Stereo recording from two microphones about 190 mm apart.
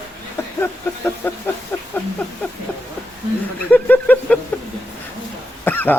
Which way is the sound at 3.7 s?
10° left (ahead or behind).